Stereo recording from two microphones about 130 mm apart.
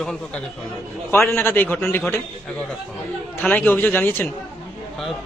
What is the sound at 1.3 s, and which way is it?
Speech, 15° left (ahead or behind).